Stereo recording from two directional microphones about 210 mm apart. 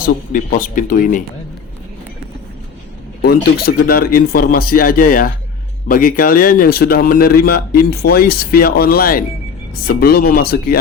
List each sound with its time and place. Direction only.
0.0 s speech: 40° left (ahead or behind)
3.2 s speech: 50° left (ahead or behind)